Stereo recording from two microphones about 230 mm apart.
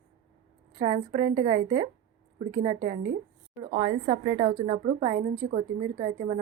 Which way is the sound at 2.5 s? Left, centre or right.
Centre.